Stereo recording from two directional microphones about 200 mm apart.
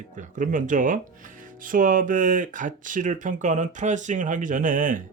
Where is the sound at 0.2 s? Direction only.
40° right (ahead or behind).